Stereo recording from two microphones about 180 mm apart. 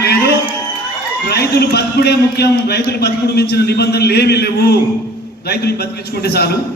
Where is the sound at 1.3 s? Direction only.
65° left (ahead or behind).